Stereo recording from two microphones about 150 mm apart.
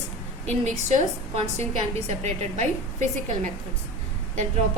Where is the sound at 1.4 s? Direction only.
45° right (ahead or behind).